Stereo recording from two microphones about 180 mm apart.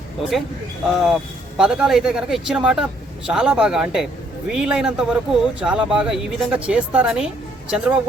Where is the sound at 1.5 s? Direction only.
5° right (ahead or behind).